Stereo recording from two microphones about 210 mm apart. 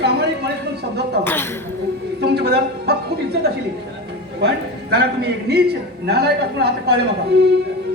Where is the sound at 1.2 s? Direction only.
10° left (ahead or behind).